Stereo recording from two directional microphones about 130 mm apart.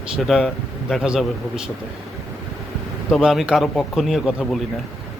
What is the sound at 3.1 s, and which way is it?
A man's voice, centre (ahead or behind).